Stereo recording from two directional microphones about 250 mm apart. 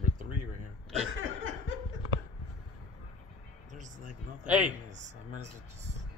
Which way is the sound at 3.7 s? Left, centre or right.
Right.